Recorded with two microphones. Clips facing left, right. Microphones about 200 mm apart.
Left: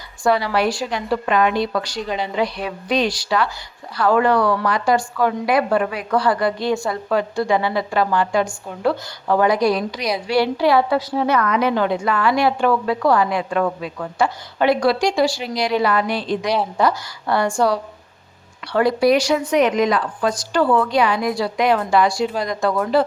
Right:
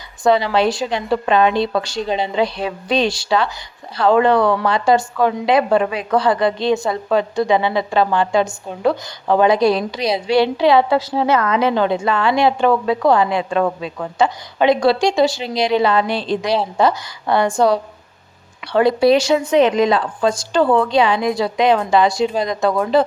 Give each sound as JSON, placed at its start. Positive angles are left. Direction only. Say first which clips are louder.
{"t": 0.3, "sound": "a woman's voice", "louder": "right 3 dB", "side_deg": -20}